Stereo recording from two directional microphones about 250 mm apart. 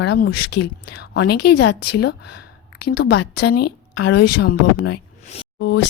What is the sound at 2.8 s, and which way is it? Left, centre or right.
A woman's voice, left.